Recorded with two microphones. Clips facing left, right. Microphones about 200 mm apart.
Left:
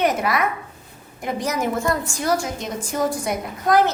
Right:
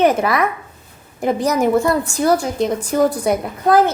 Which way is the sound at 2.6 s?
65° right (ahead or behind).